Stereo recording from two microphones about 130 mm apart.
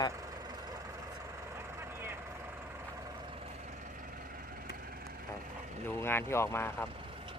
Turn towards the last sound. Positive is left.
turn(degrees=20)  # may be behind; listen again after turning